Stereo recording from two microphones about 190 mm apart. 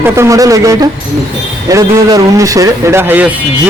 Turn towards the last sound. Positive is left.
turn(degrees=-10)  # may be behind; listen again after turning